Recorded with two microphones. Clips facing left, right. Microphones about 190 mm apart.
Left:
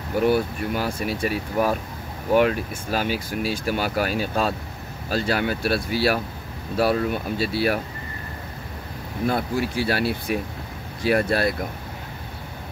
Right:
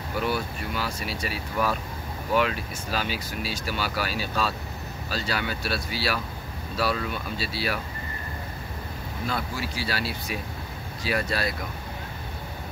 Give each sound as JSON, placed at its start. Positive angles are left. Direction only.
{"t": 0.1, "sound": "speech", "side_deg": 50}
{"t": 9.2, "sound": "speech", "side_deg": 55}